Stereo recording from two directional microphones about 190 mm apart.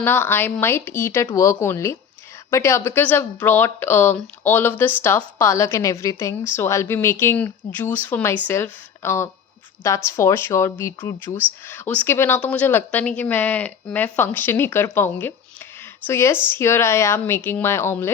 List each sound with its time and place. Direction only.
0.0 s speech: 10° left (ahead or behind)